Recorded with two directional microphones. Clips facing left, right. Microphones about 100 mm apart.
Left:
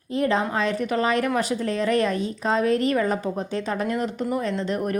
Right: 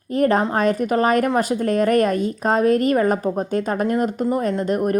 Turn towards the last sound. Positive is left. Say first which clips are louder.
# right 5 dB
turn(degrees=-45)  # may be behind; listen again after turning